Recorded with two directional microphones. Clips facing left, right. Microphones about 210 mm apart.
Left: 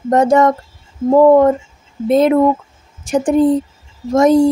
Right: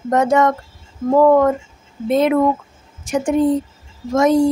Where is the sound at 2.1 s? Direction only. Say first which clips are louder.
Left 4 dB; 35° left (ahead or behind).